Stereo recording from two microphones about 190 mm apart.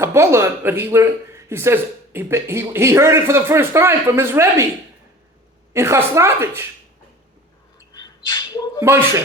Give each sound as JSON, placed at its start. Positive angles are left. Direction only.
{"t": 0.0, "sound": "speech", "side_deg": -15}
{"t": 5.7, "sound": "speech", "side_deg": -15}
{"t": 7.9, "sound": "dog", "side_deg": 20}
{"t": 8.8, "sound": "speech", "side_deg": -15}